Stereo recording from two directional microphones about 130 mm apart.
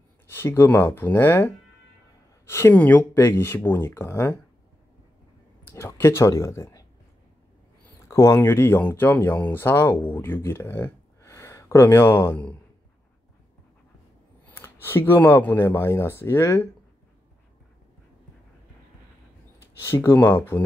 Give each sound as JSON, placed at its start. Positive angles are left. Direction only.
{"t": 0.3, "sound": "speech", "side_deg": 20}
{"t": 5.7, "sound": "speech", "side_deg": 20}
{"t": 8.1, "sound": "speech", "side_deg": 20}
{"t": 14.4, "sound": "speech", "side_deg": 15}
{"t": 19.8, "sound": "speech", "side_deg": 20}